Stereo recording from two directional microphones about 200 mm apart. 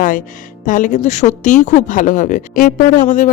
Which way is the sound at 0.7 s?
40° left (ahead or behind).